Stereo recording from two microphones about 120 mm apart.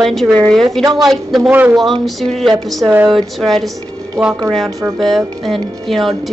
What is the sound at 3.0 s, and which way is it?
Speech, centre (ahead or behind).